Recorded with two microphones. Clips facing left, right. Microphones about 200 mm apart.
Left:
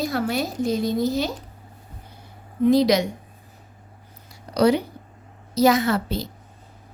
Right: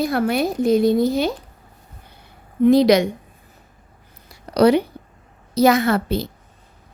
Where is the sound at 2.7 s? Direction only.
65° right (ahead or behind).